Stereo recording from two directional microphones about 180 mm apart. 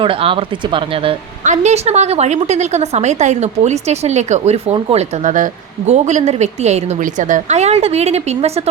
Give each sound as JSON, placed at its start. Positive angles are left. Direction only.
{"t": 0.0, "sound": "a woman's voice", "side_deg": -30}